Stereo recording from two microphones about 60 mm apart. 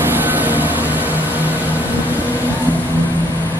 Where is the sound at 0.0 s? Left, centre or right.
Right.